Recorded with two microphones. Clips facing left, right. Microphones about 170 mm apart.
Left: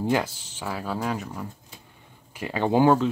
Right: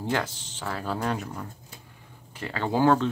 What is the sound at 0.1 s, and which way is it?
Speech, 10° left (ahead or behind).